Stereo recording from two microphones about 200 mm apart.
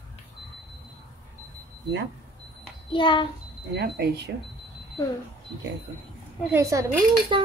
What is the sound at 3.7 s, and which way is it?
Speech, 55° right (ahead or behind).